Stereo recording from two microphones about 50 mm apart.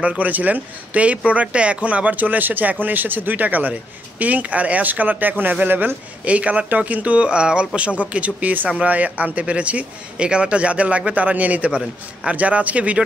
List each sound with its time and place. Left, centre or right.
0.0 s speech: right
6.2 s speech: right